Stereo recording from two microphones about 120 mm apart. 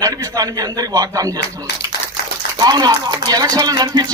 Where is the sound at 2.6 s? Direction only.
35° right (ahead or behind).